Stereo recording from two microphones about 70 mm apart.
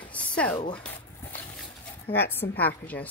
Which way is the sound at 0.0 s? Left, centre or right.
Centre.